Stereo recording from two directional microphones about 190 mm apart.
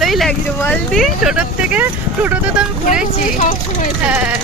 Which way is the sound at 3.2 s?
45° left (ahead or behind).